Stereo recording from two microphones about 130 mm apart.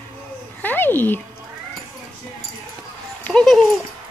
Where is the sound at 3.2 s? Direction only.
5° left (ahead or behind).